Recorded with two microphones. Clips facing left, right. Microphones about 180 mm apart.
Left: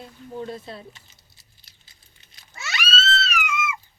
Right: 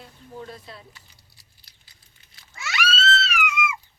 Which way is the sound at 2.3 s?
25° left (ahead or behind).